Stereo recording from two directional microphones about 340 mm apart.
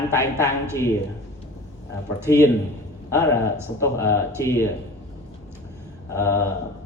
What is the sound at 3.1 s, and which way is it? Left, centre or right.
A man's voice, centre.